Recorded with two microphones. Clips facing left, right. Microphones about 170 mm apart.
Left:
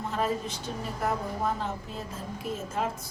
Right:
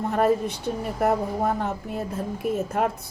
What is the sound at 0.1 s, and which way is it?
A woman's voice, 60° right (ahead or behind).